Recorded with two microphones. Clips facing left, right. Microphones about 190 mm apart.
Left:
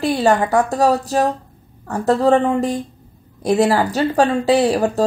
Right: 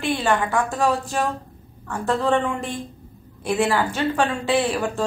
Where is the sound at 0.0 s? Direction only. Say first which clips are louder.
Left 6 dB; 40° left (ahead or behind).